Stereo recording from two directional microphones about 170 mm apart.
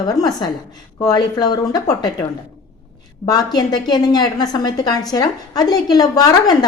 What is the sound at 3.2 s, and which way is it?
A man's voice, 25° left (ahead or behind).